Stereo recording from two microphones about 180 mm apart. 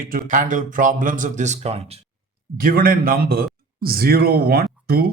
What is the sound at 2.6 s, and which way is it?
A man's voice, 55° right (ahead or behind).